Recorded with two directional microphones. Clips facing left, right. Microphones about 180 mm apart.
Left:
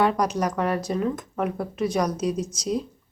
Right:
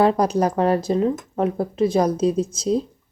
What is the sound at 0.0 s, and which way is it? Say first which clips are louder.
Speech: right 5 dB; 30° right (ahead or behind).